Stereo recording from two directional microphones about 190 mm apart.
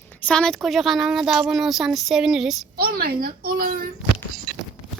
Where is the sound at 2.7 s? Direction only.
50° right (ahead or behind).